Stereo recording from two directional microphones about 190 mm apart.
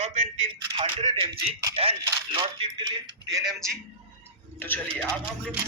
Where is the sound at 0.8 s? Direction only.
30° right (ahead or behind).